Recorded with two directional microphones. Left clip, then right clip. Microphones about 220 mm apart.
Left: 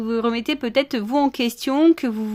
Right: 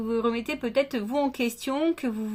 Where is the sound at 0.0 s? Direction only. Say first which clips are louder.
Left 4 dB; 45° left (ahead or behind).